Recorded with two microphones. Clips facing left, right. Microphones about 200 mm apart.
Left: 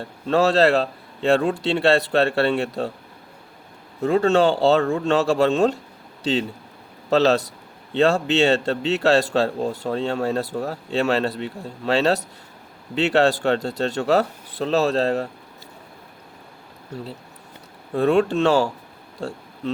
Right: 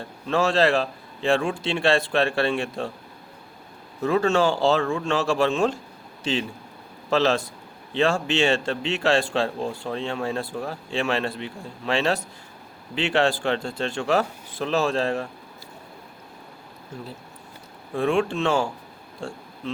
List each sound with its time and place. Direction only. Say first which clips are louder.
0.0 s a man's voice: left 4 dB; 35° left (ahead or behind)
4.0 s a man's voice: left 3 dB; 35° left (ahead or behind)
7.1 s a man's voice: left 4 dB; 35° left (ahead or behind)
17.9 s a man's voice: left 4 dB; 40° left (ahead or behind)